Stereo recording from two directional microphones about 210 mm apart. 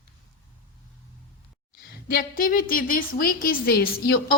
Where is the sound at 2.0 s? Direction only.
40° left (ahead or behind).